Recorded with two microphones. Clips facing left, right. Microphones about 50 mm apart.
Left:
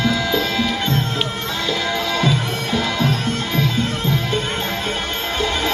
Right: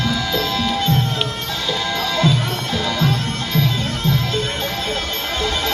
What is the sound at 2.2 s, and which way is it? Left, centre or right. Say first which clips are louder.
Music: right 1 dB; centre.